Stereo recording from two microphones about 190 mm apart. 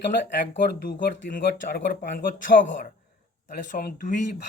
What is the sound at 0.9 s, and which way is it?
Speech, 45° left (ahead or behind).